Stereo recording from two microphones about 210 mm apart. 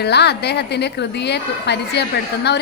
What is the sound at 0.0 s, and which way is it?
Speech, 50° left (ahead or behind).